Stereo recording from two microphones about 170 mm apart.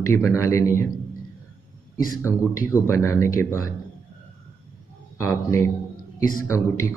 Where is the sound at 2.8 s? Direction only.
15° left (ahead or behind).